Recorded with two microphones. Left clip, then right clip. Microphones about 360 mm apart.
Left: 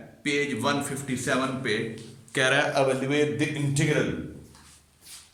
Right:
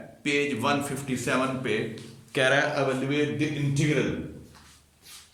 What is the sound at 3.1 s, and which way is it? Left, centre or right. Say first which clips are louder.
Speech: left 2 dB; centre.